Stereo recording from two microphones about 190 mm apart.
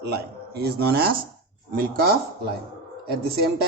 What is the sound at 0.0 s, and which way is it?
A man's voice, 60° right (ahead or behind).